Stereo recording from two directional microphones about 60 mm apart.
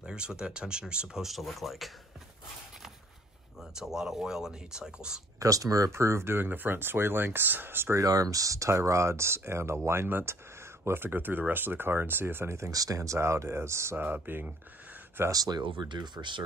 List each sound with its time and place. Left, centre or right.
0.0 s speech: centre
3.7 s speech: centre
5.4 s speech: right
5.9 s speech: right
8.0 s speech: right
12.7 s speech: right
13.9 s speech: right
16.2 s speech: right